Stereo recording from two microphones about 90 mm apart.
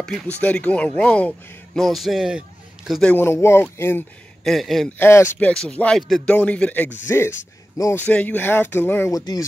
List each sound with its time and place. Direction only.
0.3 s speech: 15° left (ahead or behind)
1.8 s speech: centre (ahead or behind)
3.2 s speech: 25° left (ahead or behind)
4.5 s speech: centre (ahead or behind)
4.8 s speech: 25° left (ahead or behind)
5.5 s speech: 10° left (ahead or behind)
6.2 s speech: 15° left (ahead or behind)
7.1 s speech: 25° left (ahead or behind)
7.9 s speech: 15° left (ahead or behind)
9.1 s speech: 45° left (ahead or behind)